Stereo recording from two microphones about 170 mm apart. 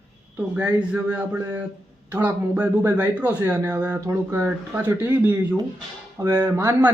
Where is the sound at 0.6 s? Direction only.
5° right (ahead or behind).